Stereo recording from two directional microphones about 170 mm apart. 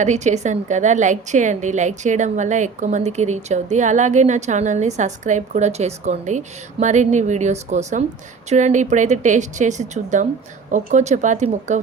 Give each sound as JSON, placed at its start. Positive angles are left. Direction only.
{"t": 0.0, "sound": "a woman's voice", "side_deg": -45}